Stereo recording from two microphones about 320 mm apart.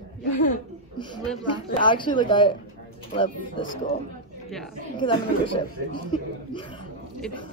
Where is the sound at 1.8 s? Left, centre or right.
Centre.